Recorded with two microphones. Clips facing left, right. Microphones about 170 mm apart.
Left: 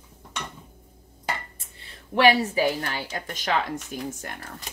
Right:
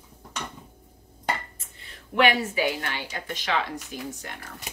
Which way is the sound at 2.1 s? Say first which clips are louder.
Left 3 dB; 35° left (ahead or behind).